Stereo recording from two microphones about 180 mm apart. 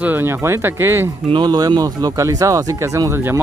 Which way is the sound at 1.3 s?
25° right (ahead or behind).